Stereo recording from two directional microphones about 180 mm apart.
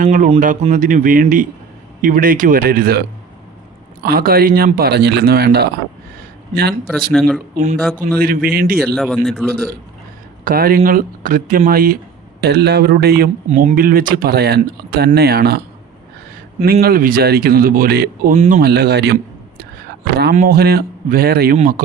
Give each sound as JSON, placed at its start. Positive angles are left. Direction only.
{"t": 0.0, "sound": "speech", "side_deg": -45}
{"t": 4.0, "sound": "speech", "side_deg": -55}
{"t": 7.1, "sound": "a man's voice", "side_deg": 0}
{"t": 8.2, "sound": "speech", "side_deg": -55}
{"t": 9.0, "sound": "a man's voice", "side_deg": 0}
{"t": 10.4, "sound": "speech", "side_deg": -55}
{"t": 12.4, "sound": "speech", "side_deg": -65}
{"t": 13.5, "sound": "speech", "side_deg": -45}
{"t": 16.8, "sound": "speech", "side_deg": -55}
{"t": 18.3, "sound": "speech", "side_deg": -45}
{"t": 18.6, "sound": "speech", "side_deg": -60}
{"t": 20.3, "sound": "speech", "side_deg": -55}